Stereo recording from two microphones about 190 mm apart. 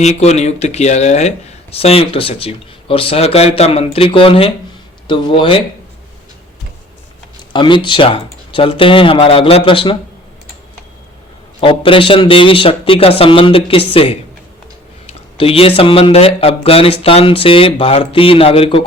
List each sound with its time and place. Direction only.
0.0 s speech: 35° left (ahead or behind)
7.5 s speech: 25° left (ahead or behind)
11.6 s speech: 30° left (ahead or behind)